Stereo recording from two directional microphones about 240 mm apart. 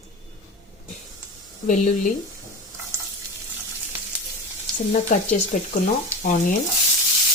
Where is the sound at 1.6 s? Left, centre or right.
Left.